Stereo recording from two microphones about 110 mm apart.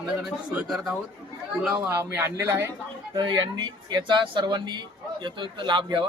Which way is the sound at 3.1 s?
40° right (ahead or behind).